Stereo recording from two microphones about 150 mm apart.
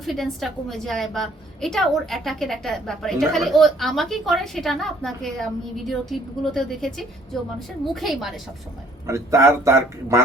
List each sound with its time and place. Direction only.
0.0 s a woman's voice: centre (ahead or behind)
7.9 s a woman's voice: centre (ahead or behind)
9.0 s speech: 20° right (ahead or behind)